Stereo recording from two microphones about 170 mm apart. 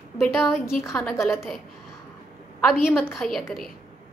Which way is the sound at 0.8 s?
15° left (ahead or behind).